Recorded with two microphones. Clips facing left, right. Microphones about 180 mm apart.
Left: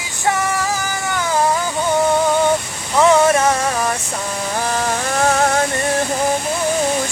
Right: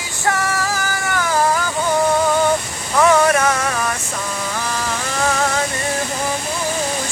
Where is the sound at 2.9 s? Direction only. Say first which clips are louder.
Left 1 dB; 25° left (ahead or behind).